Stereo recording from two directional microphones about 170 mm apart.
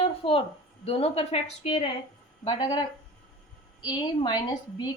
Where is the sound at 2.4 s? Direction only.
25° left (ahead or behind).